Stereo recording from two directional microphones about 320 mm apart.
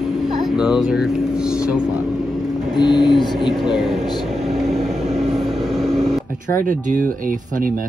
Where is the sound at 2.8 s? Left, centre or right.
Centre.